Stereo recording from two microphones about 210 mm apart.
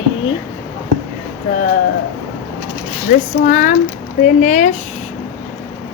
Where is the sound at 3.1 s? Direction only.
40° left (ahead or behind).